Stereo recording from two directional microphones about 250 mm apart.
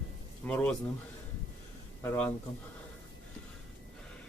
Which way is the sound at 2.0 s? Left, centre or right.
Centre.